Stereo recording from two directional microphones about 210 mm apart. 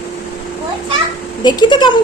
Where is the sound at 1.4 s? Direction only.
20° left (ahead or behind).